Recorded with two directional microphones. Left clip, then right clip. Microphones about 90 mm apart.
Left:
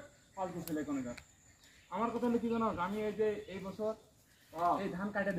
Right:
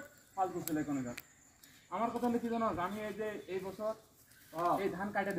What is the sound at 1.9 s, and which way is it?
A man's voice, 20° left (ahead or behind).